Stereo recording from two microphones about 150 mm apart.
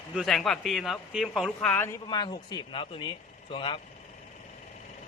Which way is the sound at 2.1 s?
30° left (ahead or behind).